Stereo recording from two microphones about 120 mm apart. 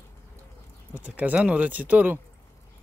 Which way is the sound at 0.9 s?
10° right (ahead or behind).